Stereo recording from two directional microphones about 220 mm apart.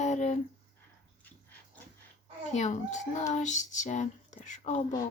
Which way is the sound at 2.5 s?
30° left (ahead or behind).